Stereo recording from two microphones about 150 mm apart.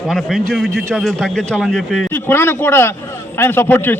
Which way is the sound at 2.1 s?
15° left (ahead or behind).